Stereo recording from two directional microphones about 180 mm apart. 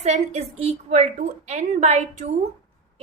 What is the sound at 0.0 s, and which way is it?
A woman's voice, 40° right (ahead or behind).